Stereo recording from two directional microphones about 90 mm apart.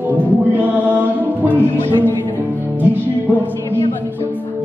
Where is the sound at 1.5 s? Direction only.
20° left (ahead or behind).